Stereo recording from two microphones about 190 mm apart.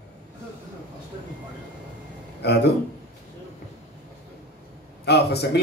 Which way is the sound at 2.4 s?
60° left (ahead or behind).